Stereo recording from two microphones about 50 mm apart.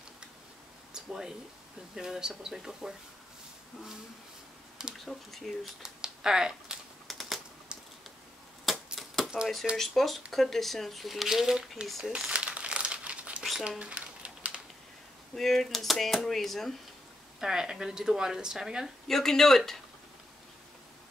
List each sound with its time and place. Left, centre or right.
0.9 s a sound: centre
2.0 s speech: centre
4.9 s speech: centre
5.8 s speech: centre
7.1 s typing: centre
8.6 s a sound: centre
9.8 s speech: centre
12.3 s crumpling: right
13.4 s a sound: centre
13.7 s a sound: right
15.3 s speech: centre
17.4 s speech: centre
19.0 s speech: centre